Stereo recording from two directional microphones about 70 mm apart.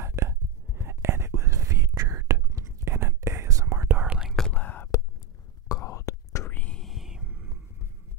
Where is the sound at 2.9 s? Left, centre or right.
Right.